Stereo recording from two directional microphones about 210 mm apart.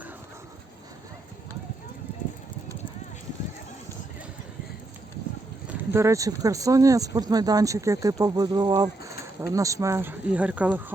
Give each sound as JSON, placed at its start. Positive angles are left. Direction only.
{"t": 5.9, "sound": "speech", "side_deg": -15}